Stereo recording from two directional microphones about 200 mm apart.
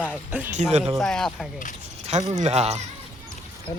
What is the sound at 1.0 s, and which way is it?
Speech, 5° left (ahead or behind).